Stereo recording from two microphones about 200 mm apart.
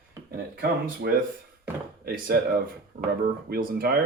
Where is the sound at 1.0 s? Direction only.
55° right (ahead or behind).